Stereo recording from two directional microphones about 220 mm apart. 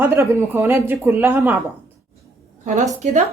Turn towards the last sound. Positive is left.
turn(degrees=-30)  # may be behind; listen again after turning